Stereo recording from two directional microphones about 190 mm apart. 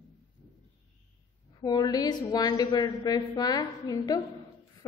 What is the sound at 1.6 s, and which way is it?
A woman's voice, 20° left (ahead or behind).